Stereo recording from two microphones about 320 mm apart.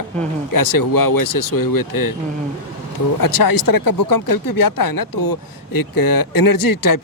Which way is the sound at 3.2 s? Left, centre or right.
Left.